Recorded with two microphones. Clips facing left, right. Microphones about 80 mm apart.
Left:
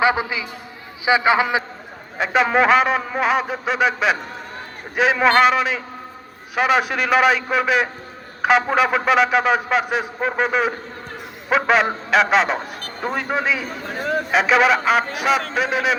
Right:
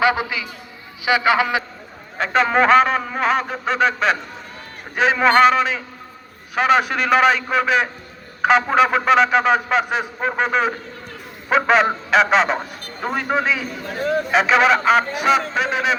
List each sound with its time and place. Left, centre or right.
0.0 s a sound: left
1.0 s a man's voice: left
2.1 s a man's voice: centre